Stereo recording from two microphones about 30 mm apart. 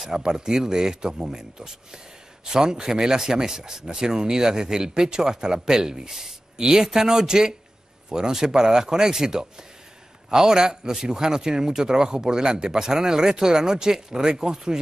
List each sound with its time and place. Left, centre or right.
0.1 s a man's voice: right